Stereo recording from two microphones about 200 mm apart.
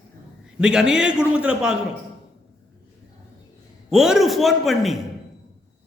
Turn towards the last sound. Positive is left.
turn(degrees=0)  # may be behind; listen again after turning